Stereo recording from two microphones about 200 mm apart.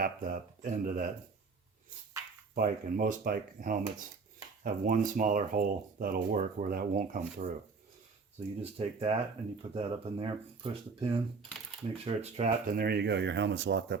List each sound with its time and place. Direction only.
0.0 s speech: 45° right (ahead or behind)
2.6 s speech: 40° right (ahead or behind)
8.6 s speech: 30° right (ahead or behind); by 14.0 s 65° right (ahead or behind)